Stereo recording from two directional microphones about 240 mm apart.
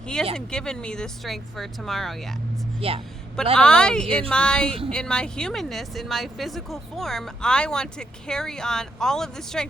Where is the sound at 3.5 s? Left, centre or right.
Centre.